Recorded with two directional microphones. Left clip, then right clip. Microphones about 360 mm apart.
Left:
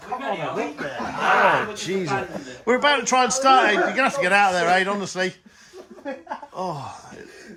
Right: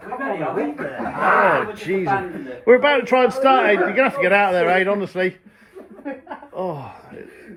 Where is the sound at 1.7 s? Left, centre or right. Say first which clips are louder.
Right 4 dB; centre.